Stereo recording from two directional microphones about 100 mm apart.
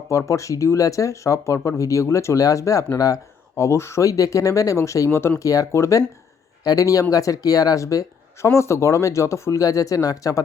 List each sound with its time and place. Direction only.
0.1 s speech: 30° left (ahead or behind)